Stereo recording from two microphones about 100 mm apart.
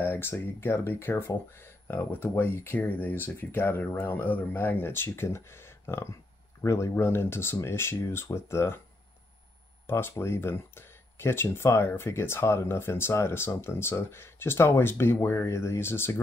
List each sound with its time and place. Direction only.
0.0 s speech: 25° left (ahead or behind)
9.8 s speech: 25° left (ahead or behind)